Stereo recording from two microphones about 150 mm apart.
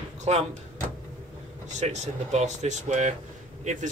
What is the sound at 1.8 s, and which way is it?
Speech, 50° right (ahead or behind).